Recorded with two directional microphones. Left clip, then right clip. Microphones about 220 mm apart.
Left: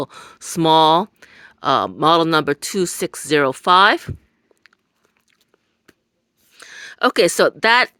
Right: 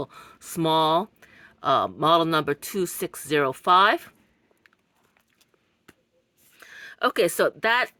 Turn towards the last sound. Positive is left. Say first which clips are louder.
# left 8 dB
turn(degrees=45)  # may be behind; listen again after turning